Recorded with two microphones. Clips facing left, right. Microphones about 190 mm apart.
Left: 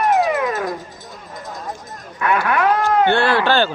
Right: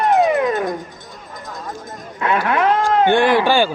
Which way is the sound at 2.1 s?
25° right (ahead or behind).